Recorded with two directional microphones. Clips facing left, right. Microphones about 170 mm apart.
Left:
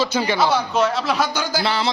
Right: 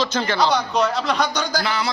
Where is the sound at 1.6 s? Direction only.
30° left (ahead or behind).